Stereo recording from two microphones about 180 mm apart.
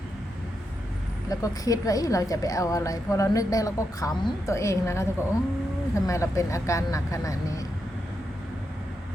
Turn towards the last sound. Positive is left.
turn(degrees=20)  # may be behind; listen again after turning